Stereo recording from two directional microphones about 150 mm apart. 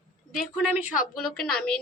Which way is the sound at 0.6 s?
10° right (ahead or behind).